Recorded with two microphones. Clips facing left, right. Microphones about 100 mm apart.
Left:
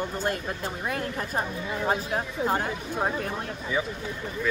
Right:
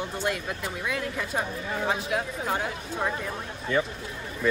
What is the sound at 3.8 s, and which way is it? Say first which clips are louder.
Speech: right 3 dB; 5° left (ahead or behind).